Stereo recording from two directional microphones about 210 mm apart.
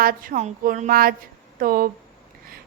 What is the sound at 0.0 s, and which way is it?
A woman's voice, 40° right (ahead or behind).